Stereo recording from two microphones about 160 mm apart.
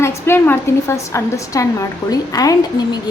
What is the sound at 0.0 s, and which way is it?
A woman's voice, 15° left (ahead or behind).